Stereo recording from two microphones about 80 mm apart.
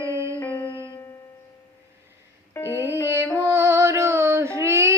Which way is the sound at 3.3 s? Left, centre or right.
Right.